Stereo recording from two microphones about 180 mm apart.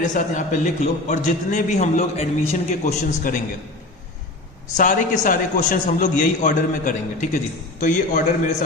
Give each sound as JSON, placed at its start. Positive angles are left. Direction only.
{"t": 0.0, "sound": "a man's voice", "side_deg": 45}
{"t": 4.8, "sound": "a man's voice", "side_deg": 45}